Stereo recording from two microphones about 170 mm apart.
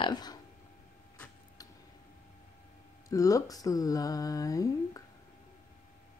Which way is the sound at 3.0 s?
20° left (ahead or behind).